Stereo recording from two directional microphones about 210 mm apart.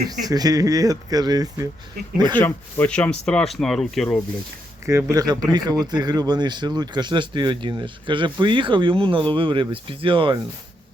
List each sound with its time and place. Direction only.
0.1 s speech: 20° right (ahead or behind)
2.4 s speech: 5° left (ahead or behind)
4.9 s speech: 15° right (ahead or behind)